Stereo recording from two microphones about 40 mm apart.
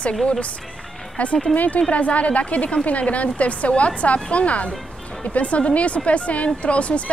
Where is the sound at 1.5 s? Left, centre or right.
Left.